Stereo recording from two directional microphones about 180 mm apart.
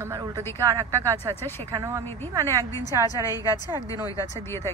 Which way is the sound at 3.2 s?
20° left (ahead or behind).